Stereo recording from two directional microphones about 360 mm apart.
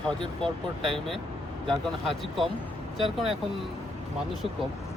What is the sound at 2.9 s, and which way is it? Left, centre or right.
Mantra, centre.